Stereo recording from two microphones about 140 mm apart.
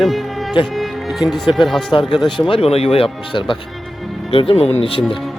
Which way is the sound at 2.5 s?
45° left (ahead or behind).